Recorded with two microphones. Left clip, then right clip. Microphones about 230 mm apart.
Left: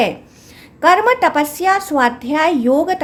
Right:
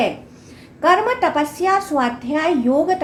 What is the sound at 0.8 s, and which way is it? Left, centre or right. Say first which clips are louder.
A woman's voice: left 4 dB; left.